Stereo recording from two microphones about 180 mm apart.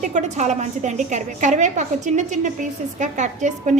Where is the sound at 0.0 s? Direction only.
40° right (ahead or behind).